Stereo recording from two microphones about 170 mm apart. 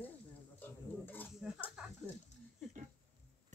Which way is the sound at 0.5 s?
10° left (ahead or behind).